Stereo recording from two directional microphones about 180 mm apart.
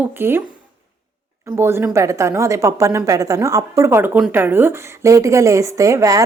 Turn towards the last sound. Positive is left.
turn(degrees=-20)  # may be behind; listen again after turning